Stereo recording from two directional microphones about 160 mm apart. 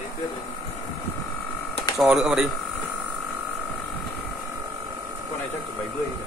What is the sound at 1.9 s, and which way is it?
Speech, centre (ahead or behind).